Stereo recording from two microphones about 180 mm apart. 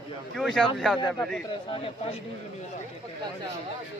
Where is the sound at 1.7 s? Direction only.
30° left (ahead or behind).